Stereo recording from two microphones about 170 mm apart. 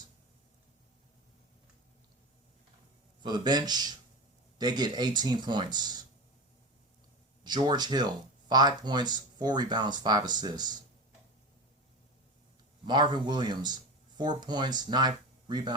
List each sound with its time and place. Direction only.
3.2 s speech: 25° right (ahead or behind)
7.4 s speech: 25° right (ahead or behind)
12.8 s speech: 25° right (ahead or behind)